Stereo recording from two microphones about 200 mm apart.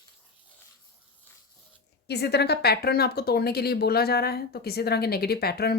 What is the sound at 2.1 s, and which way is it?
Speech, 55° left (ahead or behind).